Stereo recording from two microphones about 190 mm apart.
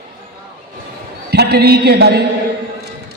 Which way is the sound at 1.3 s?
55° right (ahead or behind).